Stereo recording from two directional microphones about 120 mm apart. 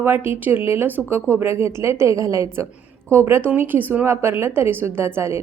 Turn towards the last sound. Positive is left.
turn(degrees=-20)  # may be behind; listen again after turning